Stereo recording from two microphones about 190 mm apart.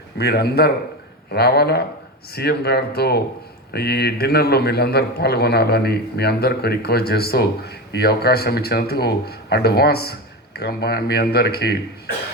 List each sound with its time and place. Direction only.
0.2 s a man's voice: 55° left (ahead or behind)